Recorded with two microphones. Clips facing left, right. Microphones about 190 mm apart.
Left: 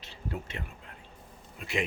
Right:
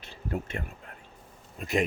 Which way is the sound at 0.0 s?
50° right (ahead or behind).